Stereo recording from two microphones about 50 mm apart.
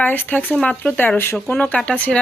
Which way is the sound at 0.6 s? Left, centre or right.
Left.